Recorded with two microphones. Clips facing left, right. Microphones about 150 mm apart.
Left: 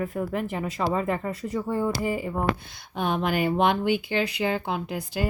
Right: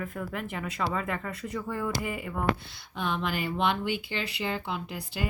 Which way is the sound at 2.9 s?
50° left (ahead or behind).